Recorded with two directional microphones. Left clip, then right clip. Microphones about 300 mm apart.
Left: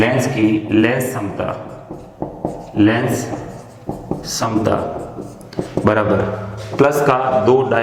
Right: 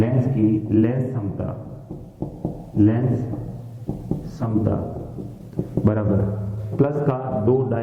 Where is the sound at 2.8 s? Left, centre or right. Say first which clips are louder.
Left 5 dB; centre.